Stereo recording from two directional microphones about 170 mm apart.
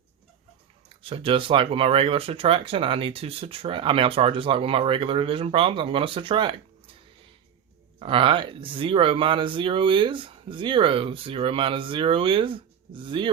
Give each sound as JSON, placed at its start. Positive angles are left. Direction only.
{"t": 0.9, "sound": "speech", "side_deg": -30}
{"t": 7.9, "sound": "speech", "side_deg": -30}